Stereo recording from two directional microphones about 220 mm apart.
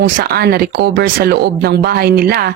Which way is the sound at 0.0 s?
45° right (ahead or behind).